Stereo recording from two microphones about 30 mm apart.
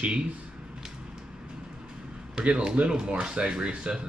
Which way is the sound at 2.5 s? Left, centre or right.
Right.